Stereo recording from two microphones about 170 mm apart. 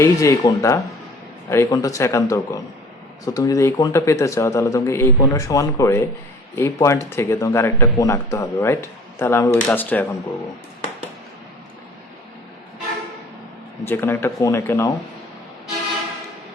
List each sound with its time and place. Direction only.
0.0 s speech: 20° left (ahead or behind)
13.8 s speech: 15° left (ahead or behind)